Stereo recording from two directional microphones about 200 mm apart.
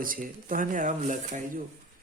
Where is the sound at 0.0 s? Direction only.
45° right (ahead or behind).